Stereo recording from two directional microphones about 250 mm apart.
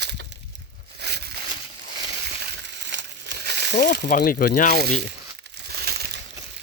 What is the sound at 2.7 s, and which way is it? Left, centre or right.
Crumpling, right.